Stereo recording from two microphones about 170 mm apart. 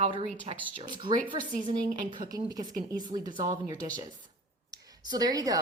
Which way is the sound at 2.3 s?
25° right (ahead or behind).